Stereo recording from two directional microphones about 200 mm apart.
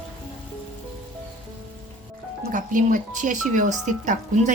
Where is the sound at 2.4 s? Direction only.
40° right (ahead or behind).